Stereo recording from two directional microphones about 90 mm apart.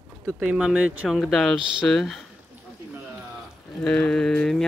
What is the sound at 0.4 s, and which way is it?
Speech, 15° right (ahead or behind).